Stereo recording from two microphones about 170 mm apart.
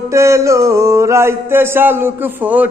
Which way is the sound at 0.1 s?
15° right (ahead or behind).